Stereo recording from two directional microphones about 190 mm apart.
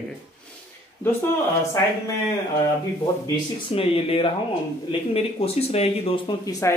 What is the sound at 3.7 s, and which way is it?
Speech, 30° left (ahead or behind).